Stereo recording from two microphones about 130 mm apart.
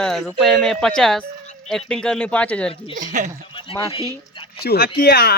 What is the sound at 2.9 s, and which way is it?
Speech, 80° right.